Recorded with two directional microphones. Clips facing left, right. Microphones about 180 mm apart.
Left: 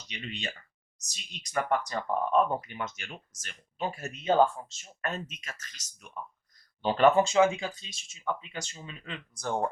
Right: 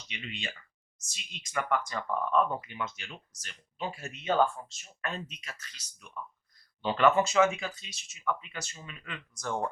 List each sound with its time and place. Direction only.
0.1 s speech: 40° left (ahead or behind)
4.3 s speech: 25° left (ahead or behind)
5.0 s speech: 45° left (ahead or behind)
7.2 s speech: 25° left (ahead or behind)